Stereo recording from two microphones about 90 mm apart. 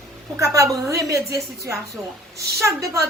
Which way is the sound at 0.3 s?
35° right (ahead or behind).